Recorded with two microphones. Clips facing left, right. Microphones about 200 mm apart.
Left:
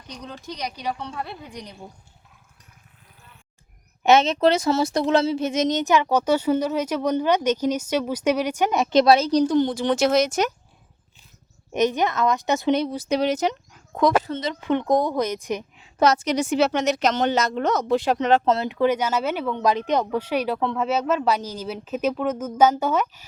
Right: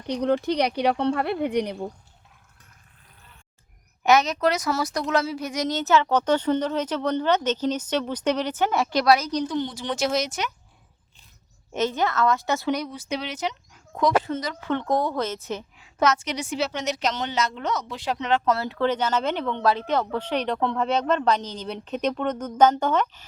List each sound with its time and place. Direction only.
0.1 s speech: 65° right (ahead or behind)
4.0 s speech: 25° left (ahead or behind); by 10.5 s 45° left (ahead or behind)
11.7 s speech: 15° left (ahead or behind); by 14.1 s 50° left (ahead or behind)
14.3 s speech: 20° left (ahead or behind)
16.0 s a woman's voice: 35° left (ahead or behind)
18.4 s speech: 20° left (ahead or behind)